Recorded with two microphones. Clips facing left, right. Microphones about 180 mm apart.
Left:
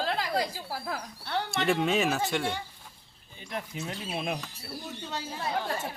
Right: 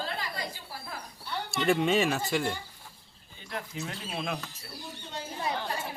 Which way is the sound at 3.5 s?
15° left (ahead or behind).